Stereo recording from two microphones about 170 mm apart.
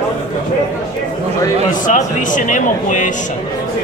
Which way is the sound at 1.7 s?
50° left (ahead or behind).